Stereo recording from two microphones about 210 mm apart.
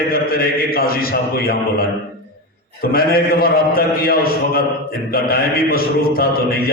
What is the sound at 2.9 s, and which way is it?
A man's voice, 45° left (ahead or behind).